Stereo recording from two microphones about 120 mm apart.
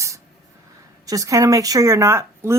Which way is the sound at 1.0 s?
30° right (ahead or behind).